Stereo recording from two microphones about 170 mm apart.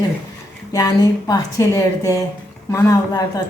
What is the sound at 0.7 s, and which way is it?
A man's voice, 20° left (ahead or behind).